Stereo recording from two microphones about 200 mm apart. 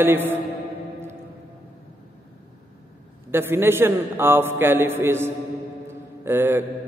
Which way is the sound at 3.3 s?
10° right (ahead or behind).